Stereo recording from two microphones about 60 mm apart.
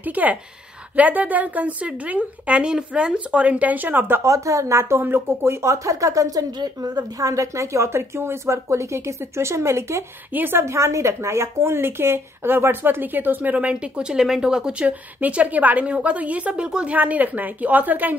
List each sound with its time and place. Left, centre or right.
0.0 s a woman's voice: right
4.2 s speech: right
10.3 s a woman's voice: right
10.6 s a woman's voice: right; by 16.9 s centre
16.9 s a woman's voice: right